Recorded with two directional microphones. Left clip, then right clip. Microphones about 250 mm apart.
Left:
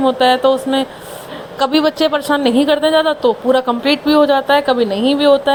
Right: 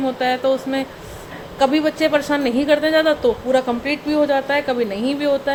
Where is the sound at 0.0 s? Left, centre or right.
Centre.